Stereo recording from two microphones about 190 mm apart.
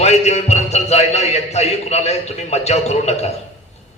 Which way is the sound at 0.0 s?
35° left (ahead or behind).